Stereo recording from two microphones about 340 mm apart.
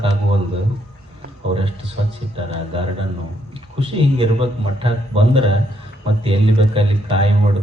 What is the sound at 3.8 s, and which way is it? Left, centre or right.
A man's voice, centre.